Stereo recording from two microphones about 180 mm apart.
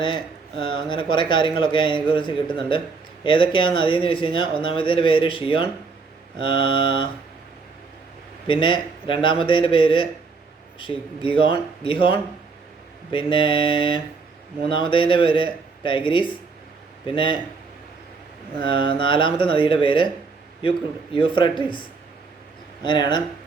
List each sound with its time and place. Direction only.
0.0 s speech: 25° left (ahead or behind)
8.4 s speech: 30° left (ahead or behind)
18.6 s speech: 30° left (ahead or behind)